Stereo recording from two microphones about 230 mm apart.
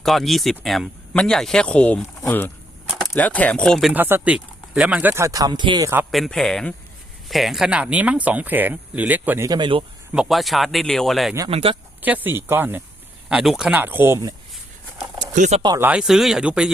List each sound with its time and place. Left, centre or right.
0.0 s speech: centre; by 9.8 s right
10.1 s speech: centre
11.3 s speech: right
12.0 s speech: centre
15.4 s speech: right
15.6 s speech: centre